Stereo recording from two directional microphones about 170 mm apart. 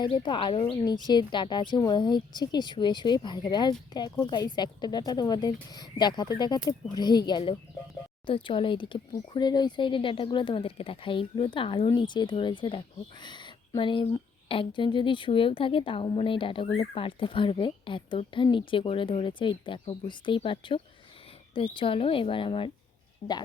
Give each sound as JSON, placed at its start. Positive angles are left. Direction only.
{"t": 0.0, "sound": "speech", "side_deg": 30}
{"t": 23.2, "sound": "speech", "side_deg": 90}